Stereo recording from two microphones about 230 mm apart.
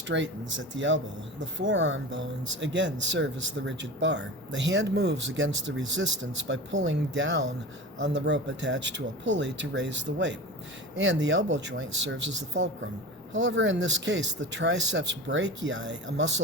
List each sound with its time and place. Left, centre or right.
0.1 s speech: right